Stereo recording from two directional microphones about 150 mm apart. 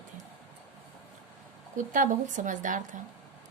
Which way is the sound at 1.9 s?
60° right (ahead or behind).